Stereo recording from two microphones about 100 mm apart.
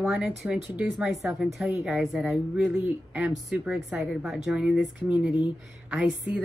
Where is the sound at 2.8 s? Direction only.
15° right (ahead or behind).